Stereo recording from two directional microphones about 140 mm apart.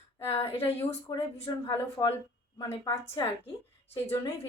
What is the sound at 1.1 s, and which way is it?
Speech, 30° left (ahead or behind).